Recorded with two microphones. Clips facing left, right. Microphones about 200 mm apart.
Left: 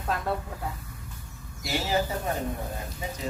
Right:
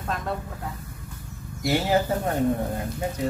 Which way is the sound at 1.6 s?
55° right (ahead or behind).